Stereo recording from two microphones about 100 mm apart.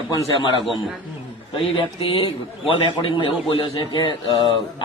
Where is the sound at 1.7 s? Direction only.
65° left (ahead or behind).